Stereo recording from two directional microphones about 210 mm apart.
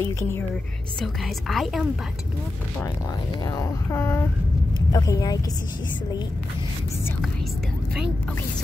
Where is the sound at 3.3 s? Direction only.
15° left (ahead or behind).